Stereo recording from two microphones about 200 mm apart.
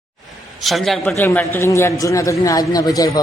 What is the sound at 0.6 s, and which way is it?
A man's voice, centre (ahead or behind).